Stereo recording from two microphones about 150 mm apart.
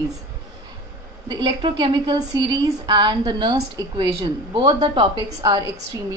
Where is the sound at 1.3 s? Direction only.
30° right (ahead or behind).